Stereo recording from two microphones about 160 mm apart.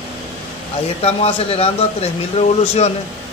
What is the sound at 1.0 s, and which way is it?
Speech, 40° left (ahead or behind).